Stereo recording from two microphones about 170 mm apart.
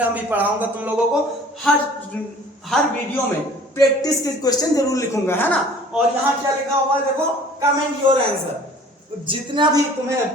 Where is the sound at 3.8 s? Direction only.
20° left (ahead or behind).